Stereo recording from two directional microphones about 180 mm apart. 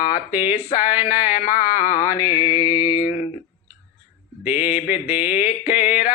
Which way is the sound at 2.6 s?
15° right (ahead or behind).